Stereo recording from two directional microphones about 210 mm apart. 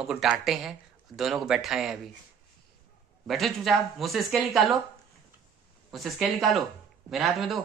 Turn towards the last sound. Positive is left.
turn(degrees=0)  # may be behind; listen again after turning